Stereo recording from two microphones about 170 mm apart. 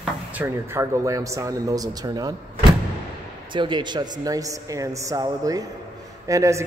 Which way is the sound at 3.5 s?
25° right (ahead or behind).